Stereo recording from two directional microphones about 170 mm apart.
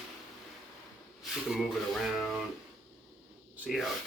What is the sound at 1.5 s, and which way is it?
Speech, centre (ahead or behind).